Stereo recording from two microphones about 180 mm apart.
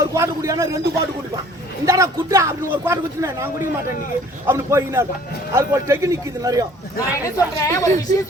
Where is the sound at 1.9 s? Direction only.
15° right (ahead or behind).